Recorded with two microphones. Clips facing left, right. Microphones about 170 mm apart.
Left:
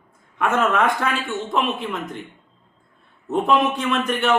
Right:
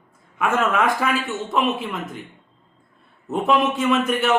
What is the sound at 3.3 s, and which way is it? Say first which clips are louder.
A man's voice: left 1 dB; centre (ahead or behind).